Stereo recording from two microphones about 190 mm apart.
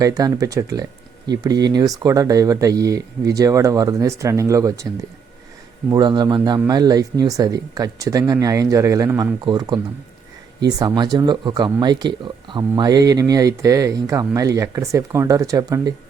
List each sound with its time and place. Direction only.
0.0 s speech: 20° right (ahead or behind)
5.9 s speech: 25° right (ahead or behind)